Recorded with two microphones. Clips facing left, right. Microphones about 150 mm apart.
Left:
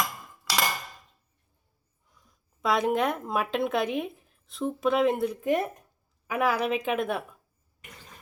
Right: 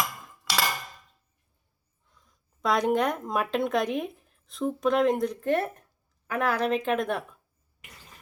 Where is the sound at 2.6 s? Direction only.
5° left (ahead or behind).